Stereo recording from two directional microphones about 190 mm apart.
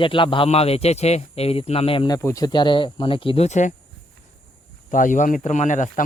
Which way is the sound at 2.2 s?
15° left (ahead or behind).